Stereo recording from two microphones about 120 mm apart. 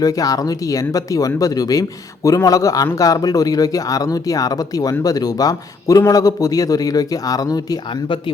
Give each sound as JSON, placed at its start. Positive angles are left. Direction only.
{"t": 0.0, "sound": "a man's voice", "side_deg": 30}